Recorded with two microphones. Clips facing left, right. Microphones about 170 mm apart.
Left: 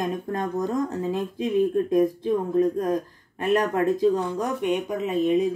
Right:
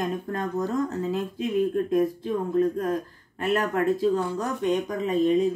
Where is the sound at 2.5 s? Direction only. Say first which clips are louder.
Even; 20° left (ahead or behind).